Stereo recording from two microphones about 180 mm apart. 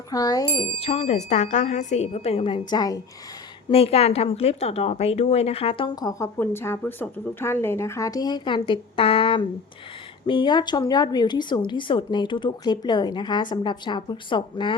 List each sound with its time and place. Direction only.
0.1 s speech: 20° left (ahead or behind)
3.7 s speech: 35° left (ahead or behind)